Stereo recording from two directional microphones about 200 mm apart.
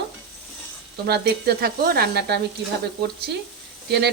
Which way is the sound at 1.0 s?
55° right (ahead or behind).